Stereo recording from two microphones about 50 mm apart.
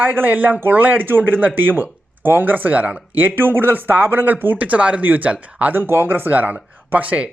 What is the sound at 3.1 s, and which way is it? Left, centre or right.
Speech, right.